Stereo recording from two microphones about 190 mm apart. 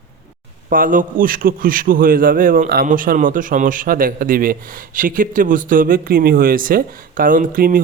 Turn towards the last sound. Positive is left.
turn(degrees=-50)  # may be behind; listen again after turning